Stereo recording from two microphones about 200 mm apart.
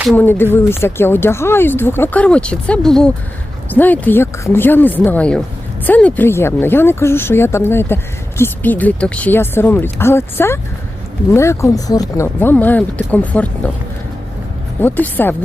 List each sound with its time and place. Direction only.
0.2 s speech: 10° left (ahead or behind)
14.8 s speech: 10° left (ahead or behind)